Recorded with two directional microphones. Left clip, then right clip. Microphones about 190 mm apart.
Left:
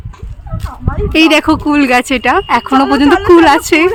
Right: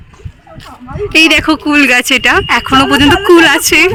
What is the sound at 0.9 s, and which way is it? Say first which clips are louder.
Speech: right 1 dB; 10° left (ahead or behind).